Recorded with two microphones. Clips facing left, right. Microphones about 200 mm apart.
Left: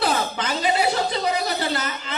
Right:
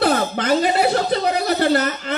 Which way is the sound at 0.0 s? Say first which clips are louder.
Right 5 dB; 55° right (ahead or behind).